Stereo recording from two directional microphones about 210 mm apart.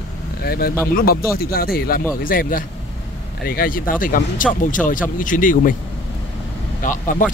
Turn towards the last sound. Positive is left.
turn(degrees=40)  # may be behind; listen again after turning